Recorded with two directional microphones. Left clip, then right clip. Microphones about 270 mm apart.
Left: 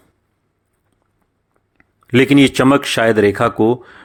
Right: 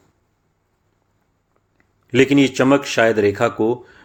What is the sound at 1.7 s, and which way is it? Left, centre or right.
Speech, left.